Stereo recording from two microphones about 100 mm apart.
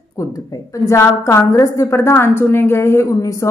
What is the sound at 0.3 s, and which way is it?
A woman's voice, 35° left (ahead or behind).